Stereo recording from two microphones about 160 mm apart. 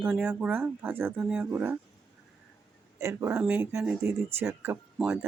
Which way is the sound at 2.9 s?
20° right (ahead or behind).